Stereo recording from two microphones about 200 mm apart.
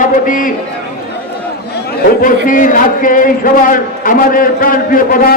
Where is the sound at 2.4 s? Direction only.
40° left (ahead or behind).